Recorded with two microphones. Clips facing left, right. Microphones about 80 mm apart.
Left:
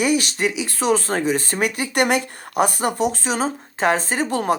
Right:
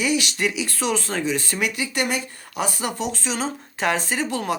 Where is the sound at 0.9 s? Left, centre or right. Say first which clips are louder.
Left 6 dB; left.